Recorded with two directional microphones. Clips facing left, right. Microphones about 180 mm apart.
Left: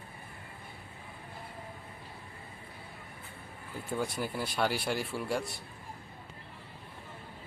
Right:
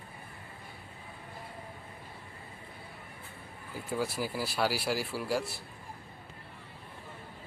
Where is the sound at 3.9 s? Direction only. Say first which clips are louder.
Right 1 dB; 5° right (ahead or behind).